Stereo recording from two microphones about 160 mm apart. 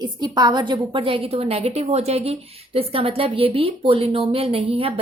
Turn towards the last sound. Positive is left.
turn(degrees=-35)  # may be behind; listen again after turning